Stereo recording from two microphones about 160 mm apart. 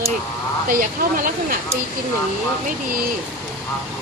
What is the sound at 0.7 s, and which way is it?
Speech, 60° right (ahead or behind).